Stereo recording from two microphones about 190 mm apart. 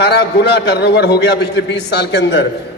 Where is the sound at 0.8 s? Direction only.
60° left (ahead or behind).